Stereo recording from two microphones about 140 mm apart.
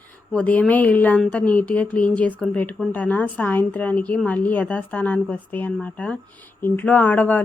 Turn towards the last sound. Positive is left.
turn(degrees=10)  # may be behind; listen again after turning